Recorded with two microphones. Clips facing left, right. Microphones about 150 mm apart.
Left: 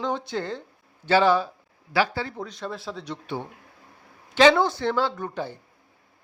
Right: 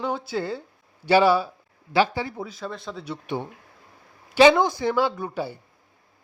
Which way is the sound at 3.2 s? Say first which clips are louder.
Right 3 dB; 15° right (ahead or behind).